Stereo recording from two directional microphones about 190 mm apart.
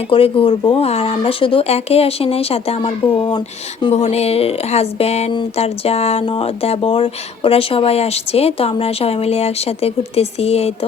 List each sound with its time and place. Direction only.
0.1 s speech: 30° left (ahead or behind)